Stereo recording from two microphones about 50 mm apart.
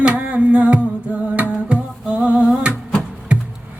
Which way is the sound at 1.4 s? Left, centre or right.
Right.